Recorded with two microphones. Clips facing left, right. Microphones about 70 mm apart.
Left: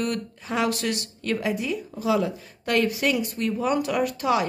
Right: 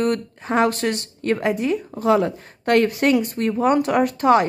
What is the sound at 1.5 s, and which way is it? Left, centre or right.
A woman's voice, right.